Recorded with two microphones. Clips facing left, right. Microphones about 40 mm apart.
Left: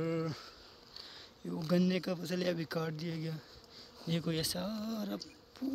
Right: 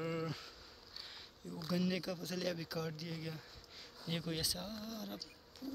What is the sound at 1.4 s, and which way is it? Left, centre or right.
Speech, centre.